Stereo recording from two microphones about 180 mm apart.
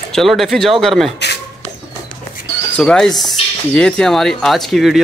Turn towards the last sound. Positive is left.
turn(degrees=0)  # may be behind; listen again after turning